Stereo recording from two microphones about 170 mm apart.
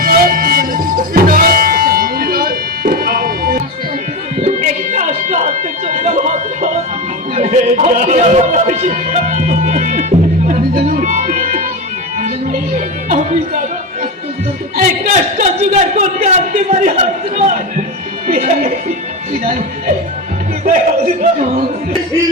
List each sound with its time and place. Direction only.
0.0 s music: 60° right (ahead or behind)
4.4 s music: 45° right (ahead or behind)
14.8 s a man's voice: 50° right (ahead or behind)
20.7 s a man's voice: 45° right (ahead or behind)